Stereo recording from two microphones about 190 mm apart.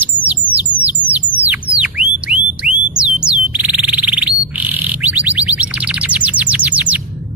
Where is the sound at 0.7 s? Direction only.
25° right (ahead or behind).